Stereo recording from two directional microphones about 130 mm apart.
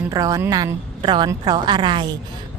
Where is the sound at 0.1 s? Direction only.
25° right (ahead or behind).